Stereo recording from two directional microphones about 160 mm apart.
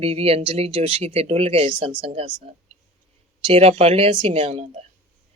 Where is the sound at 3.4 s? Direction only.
40° right (ahead or behind).